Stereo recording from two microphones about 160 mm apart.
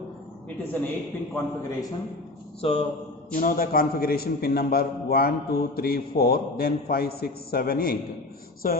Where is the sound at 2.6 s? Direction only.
40° left (ahead or behind).